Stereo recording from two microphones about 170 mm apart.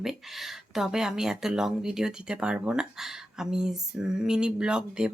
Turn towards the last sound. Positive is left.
turn(degrees=-5)  # may be behind; listen again after turning